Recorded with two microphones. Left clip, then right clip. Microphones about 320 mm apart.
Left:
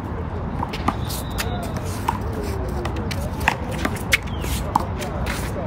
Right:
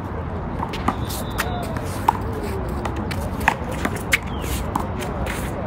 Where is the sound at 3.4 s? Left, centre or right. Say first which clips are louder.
Right 1 dB; centre.